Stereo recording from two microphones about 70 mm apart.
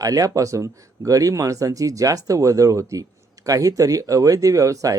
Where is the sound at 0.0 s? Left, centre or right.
Right.